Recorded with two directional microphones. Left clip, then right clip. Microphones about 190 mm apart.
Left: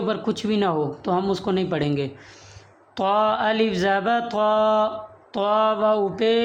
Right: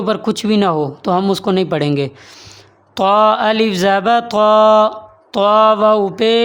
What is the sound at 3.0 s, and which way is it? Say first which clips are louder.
Mantra: right 9 dB; 35° right (ahead or behind).